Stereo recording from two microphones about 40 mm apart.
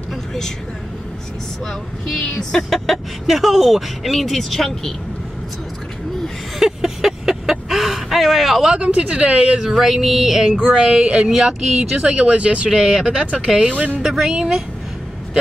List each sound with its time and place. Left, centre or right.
0.1 s vehicle: centre
1.7 s speech: centre
3.3 s speech: centre
6.6 s vehicle: centre
8.7 s a woman's voice: right
9.7 s speech: centre
10.8 s a woman's voice: right
11.3 s speech: centre
12.1 s a woman's voice: right
13.9 s speech: centre